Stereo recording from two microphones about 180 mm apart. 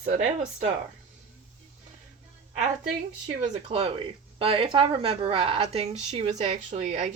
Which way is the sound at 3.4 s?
35° right (ahead or behind).